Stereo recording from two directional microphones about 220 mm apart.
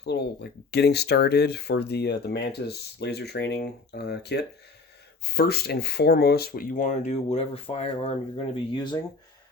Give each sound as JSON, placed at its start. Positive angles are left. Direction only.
{"t": 0.0, "sound": "speech", "side_deg": 50}